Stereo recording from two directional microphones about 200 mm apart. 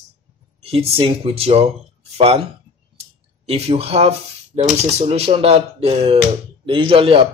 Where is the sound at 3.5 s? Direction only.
30° right (ahead or behind).